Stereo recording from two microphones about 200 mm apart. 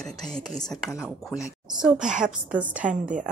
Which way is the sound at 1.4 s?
5° right (ahead or behind).